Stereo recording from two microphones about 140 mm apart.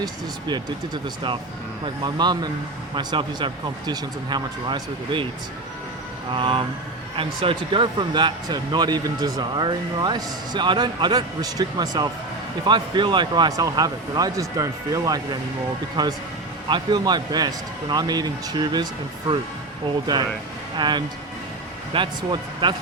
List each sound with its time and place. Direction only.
0.0 s speech: 30° right (ahead or behind)
6.3 s speech: 40° right (ahead or behind)
20.7 s speech: 35° right (ahead or behind)